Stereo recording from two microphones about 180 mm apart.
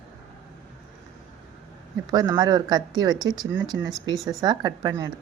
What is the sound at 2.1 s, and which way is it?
Speech, 20° right (ahead or behind).